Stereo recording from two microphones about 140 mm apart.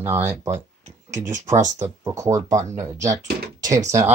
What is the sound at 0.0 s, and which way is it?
Speech, 15° right (ahead or behind).